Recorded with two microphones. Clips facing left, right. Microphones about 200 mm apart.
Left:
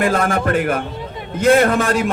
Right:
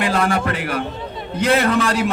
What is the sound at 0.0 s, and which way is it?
A man's voice, 45° left (ahead or behind).